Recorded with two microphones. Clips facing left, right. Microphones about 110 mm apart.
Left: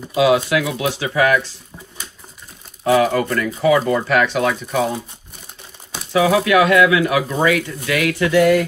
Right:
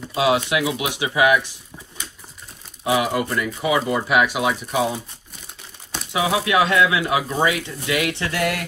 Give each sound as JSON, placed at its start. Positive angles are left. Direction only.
{"t": 0.1, "sound": "speech", "side_deg": -25}
{"t": 2.9, "sound": "speech", "side_deg": -10}
{"t": 6.1, "sound": "speech", "side_deg": -25}